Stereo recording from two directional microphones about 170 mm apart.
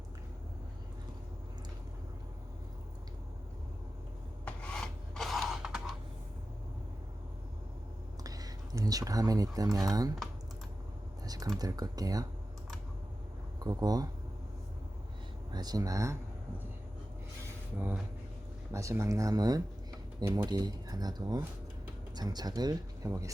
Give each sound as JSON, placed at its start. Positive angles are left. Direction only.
{"t": 4.4, "sound": "rub", "side_deg": 5}
{"t": 8.2, "sound": "a sound", "side_deg": -20}
{"t": 9.7, "sound": "speech", "side_deg": -20}
{"t": 11.5, "sound": "speech", "side_deg": -20}
{"t": 13.7, "sound": "speech", "side_deg": -20}
{"t": 15.5, "sound": "speech", "side_deg": -25}
{"t": 17.7, "sound": "speech", "side_deg": -10}